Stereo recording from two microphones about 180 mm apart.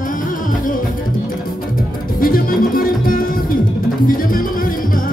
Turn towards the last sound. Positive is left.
turn(degrees=50)  # may be behind; listen again after turning